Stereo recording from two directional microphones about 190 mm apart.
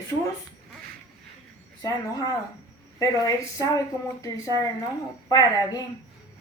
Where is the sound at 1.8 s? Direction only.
20° left (ahead or behind).